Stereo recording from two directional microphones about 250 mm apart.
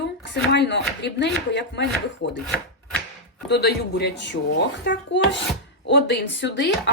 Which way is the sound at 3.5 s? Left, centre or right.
Left.